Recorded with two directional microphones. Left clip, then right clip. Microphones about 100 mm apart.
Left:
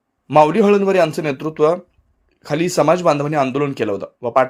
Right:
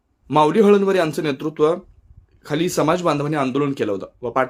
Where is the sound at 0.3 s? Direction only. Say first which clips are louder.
Left 2 dB; 20° left (ahead or behind).